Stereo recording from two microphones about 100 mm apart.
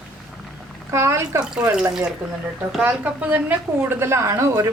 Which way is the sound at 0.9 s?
30° right (ahead or behind).